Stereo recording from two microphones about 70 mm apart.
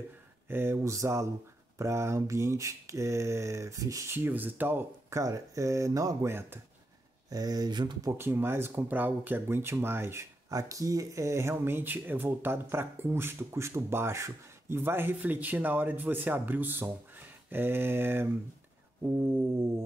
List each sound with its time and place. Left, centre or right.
0.5 s mantra: right
4.1 s speech: right
5.1 s mantra: right
6.2 s speech: right
7.2 s speech: right
8.0 s speech: right
10.5 s speech: right